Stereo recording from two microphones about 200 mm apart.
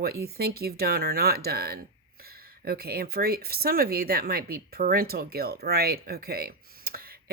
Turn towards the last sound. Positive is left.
turn(degrees=-50)  # may be behind; listen again after turning